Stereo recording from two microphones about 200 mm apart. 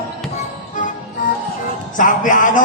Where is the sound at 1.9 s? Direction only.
40° left (ahead or behind).